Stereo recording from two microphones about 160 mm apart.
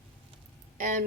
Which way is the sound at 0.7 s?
55° right (ahead or behind).